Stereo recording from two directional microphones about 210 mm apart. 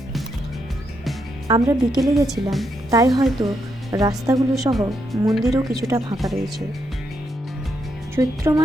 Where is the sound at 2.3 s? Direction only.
Centre (ahead or behind).